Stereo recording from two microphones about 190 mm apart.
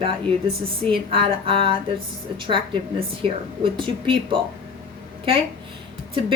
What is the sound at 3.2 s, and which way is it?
Speech, 25° right (ahead or behind).